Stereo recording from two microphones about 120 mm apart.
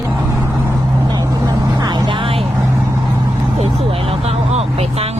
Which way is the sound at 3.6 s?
55° right (ahead or behind).